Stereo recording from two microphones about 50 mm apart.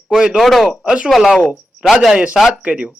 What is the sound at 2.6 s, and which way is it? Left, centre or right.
Speech, right.